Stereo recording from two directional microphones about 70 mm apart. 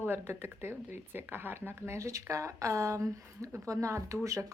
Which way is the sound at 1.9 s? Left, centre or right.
Right.